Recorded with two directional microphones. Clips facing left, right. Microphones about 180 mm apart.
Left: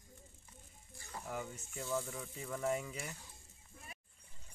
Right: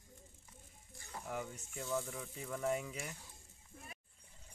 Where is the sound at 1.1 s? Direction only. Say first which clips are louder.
Even; centre (ahead or behind).